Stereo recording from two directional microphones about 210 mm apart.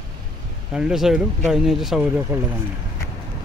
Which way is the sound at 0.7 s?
5° right (ahead or behind).